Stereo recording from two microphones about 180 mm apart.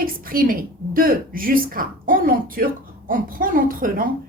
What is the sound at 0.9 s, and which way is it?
A woman's voice, 50° right (ahead or behind).